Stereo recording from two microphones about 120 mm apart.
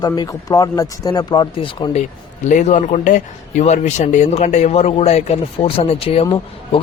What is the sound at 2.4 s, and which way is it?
Speech, 85° left.